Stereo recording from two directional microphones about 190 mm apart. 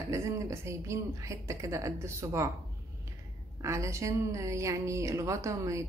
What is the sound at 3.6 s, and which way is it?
Speech, 15° right (ahead or behind).